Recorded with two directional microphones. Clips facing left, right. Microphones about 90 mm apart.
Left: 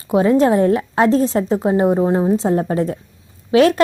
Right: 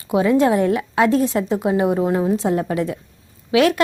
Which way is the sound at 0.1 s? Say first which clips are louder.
Left 2 dB; 30° left (ahead or behind).